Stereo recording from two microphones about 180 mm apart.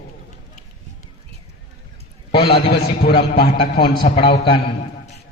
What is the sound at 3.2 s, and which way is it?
Speech, 65° left (ahead or behind).